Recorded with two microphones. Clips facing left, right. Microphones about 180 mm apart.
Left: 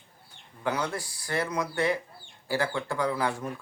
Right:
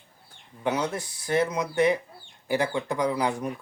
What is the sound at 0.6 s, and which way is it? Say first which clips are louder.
Speech: right 3 dB; 20° right (ahead or behind).